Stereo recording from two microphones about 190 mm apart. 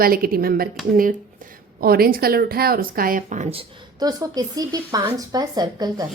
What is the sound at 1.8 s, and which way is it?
Speech, 50° right (ahead or behind).